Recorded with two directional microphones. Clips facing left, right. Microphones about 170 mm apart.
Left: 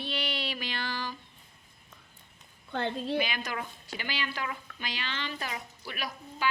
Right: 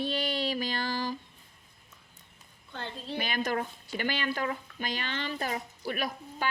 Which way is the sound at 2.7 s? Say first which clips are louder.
Left 7 dB; 60° left (ahead or behind).